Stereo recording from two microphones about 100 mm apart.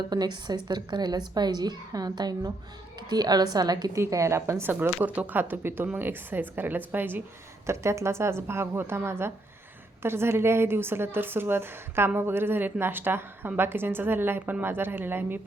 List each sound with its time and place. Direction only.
0.1 s a woman's voice: 45° right (ahead or behind)
3.9 s a woman's voice: 30° right (ahead or behind)